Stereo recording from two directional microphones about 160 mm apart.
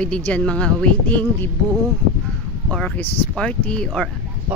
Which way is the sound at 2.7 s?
5° left (ahead or behind).